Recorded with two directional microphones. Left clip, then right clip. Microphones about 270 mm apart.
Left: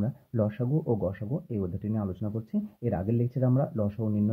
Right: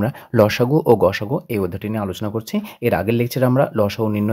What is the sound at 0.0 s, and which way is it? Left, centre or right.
Speech, right.